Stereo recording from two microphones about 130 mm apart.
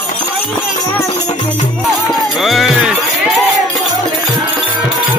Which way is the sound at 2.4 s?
Centre (ahead or behind).